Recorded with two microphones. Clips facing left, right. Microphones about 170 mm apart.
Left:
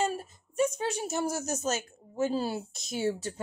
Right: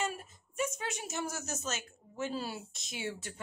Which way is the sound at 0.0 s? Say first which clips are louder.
Left 6 dB; 35° left (ahead or behind).